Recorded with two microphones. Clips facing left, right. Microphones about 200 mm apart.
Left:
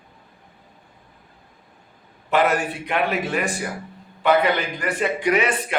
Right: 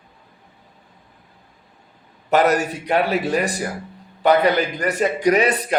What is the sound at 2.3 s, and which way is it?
Speech, 40° right (ahead or behind).